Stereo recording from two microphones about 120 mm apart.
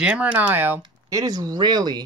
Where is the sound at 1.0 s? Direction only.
30° right (ahead or behind).